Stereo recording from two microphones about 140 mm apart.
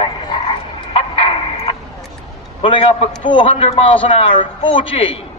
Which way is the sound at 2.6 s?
40° left (ahead or behind).